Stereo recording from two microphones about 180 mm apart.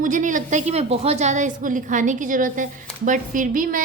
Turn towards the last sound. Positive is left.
turn(degrees=-45)  # may be behind; listen again after turning